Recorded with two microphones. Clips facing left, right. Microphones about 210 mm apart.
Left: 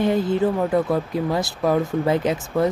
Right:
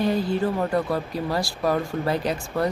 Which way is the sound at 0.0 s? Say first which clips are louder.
Left 3 dB; 20° left (ahead or behind).